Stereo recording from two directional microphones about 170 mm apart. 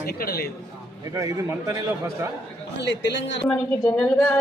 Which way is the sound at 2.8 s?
90° left.